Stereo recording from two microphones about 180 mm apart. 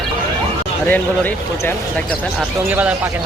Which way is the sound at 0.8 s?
10° left (ahead or behind).